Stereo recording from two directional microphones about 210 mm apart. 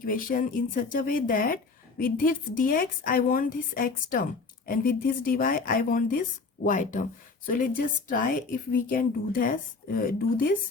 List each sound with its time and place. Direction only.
0.0 s a woman's voice: 40° left (ahead or behind)